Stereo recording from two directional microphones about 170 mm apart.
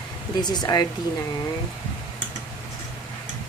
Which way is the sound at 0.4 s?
25° left (ahead or behind).